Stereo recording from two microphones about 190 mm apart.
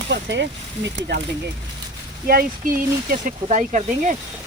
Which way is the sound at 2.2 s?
50° right (ahead or behind).